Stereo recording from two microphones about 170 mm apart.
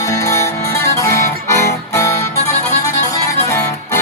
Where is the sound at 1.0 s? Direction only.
15° left (ahead or behind).